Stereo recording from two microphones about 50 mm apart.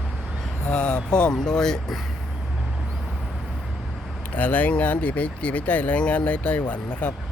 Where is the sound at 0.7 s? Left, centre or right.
Centre.